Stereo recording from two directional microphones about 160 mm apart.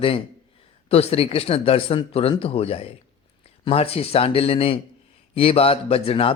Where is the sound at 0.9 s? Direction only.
40° left (ahead or behind).